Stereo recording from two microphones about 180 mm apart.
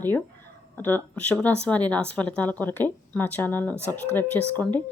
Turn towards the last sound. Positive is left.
turn(degrees=10)  # may be behind; listen again after turning